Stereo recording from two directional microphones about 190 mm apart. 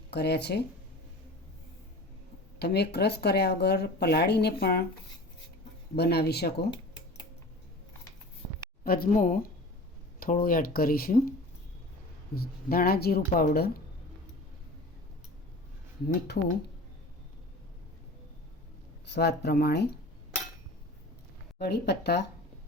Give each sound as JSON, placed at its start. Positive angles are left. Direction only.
{"t": 0.1, "sound": "speech", "side_deg": 60}
{"t": 2.6, "sound": "speech", "side_deg": 60}
{"t": 6.0, "sound": "speech", "side_deg": 55}
{"t": 8.8, "sound": "speech", "side_deg": 50}
{"t": 16.0, "sound": "speech", "side_deg": 60}
{"t": 19.0, "sound": "speech", "side_deg": 65}
{"t": 21.6, "sound": "speech", "side_deg": 60}